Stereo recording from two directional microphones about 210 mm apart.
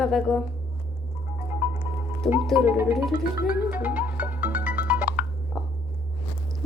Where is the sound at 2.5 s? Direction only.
10° right (ahead or behind).